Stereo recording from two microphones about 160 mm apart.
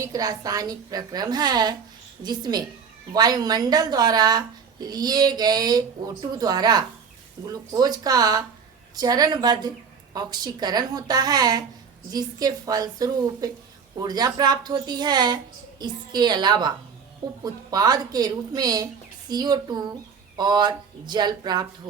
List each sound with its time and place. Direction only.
0.0 s a woman's voice: 20° right (ahead or behind)